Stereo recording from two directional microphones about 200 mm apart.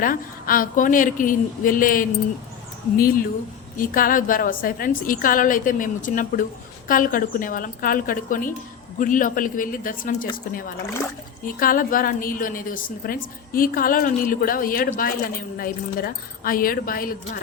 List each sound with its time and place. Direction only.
0.0 s a woman's voice: 45° left (ahead or behind)
3.8 s a woman's voice: 45° left (ahead or behind)